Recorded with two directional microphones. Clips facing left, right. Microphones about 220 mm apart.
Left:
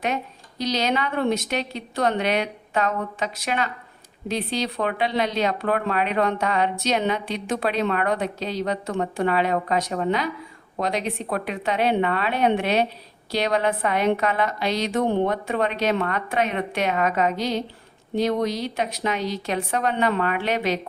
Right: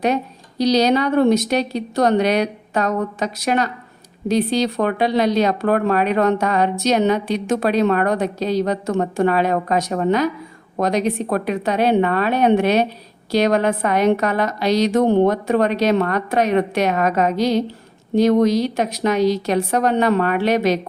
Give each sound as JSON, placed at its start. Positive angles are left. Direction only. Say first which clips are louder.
{"t": 0.6, "sound": "a woman's voice", "louder": "right 8 dB", "side_deg": -35}